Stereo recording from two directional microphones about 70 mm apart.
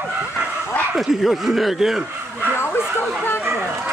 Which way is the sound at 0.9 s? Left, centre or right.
Centre.